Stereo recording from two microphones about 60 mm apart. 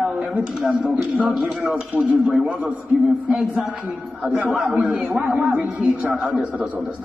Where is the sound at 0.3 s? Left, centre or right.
Centre.